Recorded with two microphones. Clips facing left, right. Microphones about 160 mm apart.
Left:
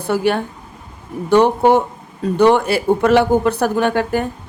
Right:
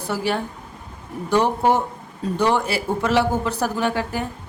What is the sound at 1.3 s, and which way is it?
Speech, 70° left (ahead or behind).